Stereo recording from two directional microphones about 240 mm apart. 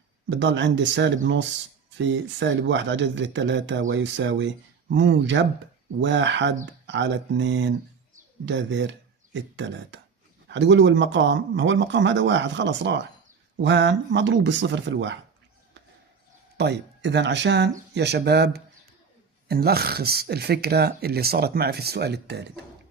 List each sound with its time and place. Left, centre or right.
0.3 s speech: right
16.6 s speech: right